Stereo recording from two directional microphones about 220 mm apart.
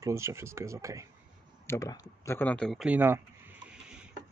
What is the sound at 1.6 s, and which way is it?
Speech, 15° left (ahead or behind).